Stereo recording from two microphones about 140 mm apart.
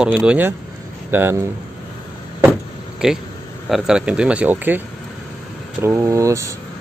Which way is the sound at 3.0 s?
5° right (ahead or behind).